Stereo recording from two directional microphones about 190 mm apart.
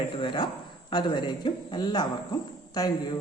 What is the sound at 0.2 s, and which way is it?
Speech, 25° left (ahead or behind).